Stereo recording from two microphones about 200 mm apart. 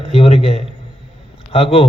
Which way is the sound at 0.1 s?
30° left (ahead or behind).